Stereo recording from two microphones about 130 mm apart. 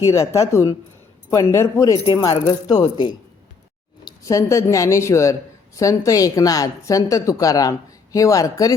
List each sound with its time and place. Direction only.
0.1 s a woman's voice: 20° left (ahead or behind)